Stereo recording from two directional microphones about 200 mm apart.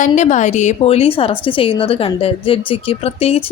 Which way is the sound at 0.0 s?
35° left (ahead or behind).